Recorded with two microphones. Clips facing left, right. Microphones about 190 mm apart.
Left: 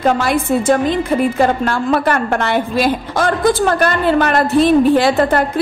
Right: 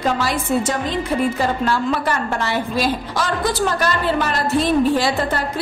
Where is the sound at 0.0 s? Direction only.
55° left (ahead or behind).